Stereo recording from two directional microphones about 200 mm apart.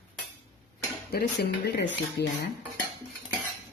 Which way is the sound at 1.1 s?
55° left (ahead or behind).